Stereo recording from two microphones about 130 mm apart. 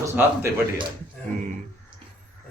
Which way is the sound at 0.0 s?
20° right (ahead or behind).